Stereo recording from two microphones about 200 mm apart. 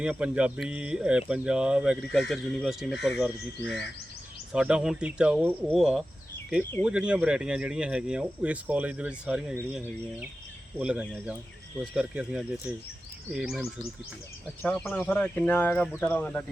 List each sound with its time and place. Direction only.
0.0 s speech: 5° right (ahead or behind)
3.6 s speech: 60° left (ahead or behind)
4.5 s speech: 5° right (ahead or behind)